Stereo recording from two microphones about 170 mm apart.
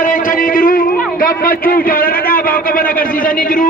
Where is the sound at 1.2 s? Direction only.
55° left (ahead or behind).